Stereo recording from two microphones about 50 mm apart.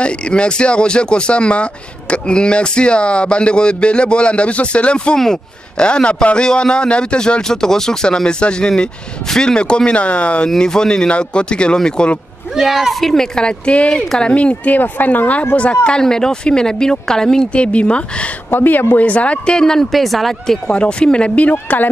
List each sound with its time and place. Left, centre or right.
0.0 s a man's voice: centre
12.5 s speech: centre
13.0 s speech: centre; by 14.8 s left
14.8 s speech: left
15.8 s a man's voice: centre
18.5 s speech: left; by 19.9 s centre
19.9 s speech: centre
20.6 s speech: left
21.5 s speech: left